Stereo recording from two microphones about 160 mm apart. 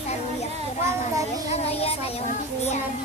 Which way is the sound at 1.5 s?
40° left (ahead or behind).